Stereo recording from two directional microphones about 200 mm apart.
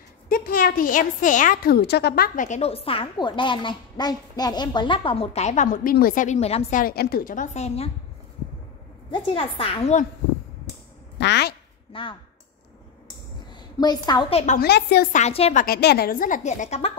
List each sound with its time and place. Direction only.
0.3 s a woman's voice: 45° left (ahead or behind)
6.8 s a woman's voice: 50° left (ahead or behind); by 7.9 s 30° left (ahead or behind)
9.1 s a woman's voice: 25° left (ahead or behind)
11.1 s a woman's voice: 60° left (ahead or behind)
11.9 s a woman's voice: 25° left (ahead or behind)
13.5 s a woman's voice: 20° left (ahead or behind)
14.4 s a woman's voice: 40° left (ahead or behind)
14.7 s a woman's voice: 55° left (ahead or behind)
15.1 s a woman's voice: 30° left (ahead or behind)
15.6 s a woman's voice: 50° left (ahead or behind); by 16.9 s 35° left (ahead or behind)